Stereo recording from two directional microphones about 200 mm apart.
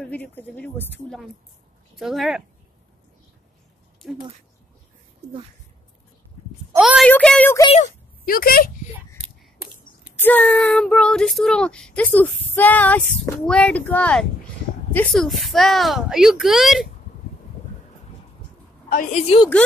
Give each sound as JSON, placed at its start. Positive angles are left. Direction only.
{"t": 0.0, "sound": "speech", "side_deg": 10}
{"t": 2.0, "sound": "child singing", "side_deg": 0}
{"t": 6.8, "sound": "a woman's voice", "side_deg": -5}
{"t": 7.7, "sound": "speech", "side_deg": 40}
{"t": 10.1, "sound": "child singing", "side_deg": 10}
{"t": 18.9, "sound": "a woman's voice", "side_deg": 45}
{"t": 19.2, "sound": "a woman's voice", "side_deg": 25}